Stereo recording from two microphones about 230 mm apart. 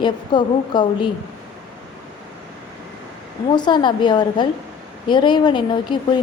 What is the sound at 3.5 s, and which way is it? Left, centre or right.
A woman's voice, centre.